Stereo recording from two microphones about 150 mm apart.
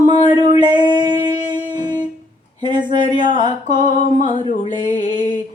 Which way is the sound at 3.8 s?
55° left (ahead or behind).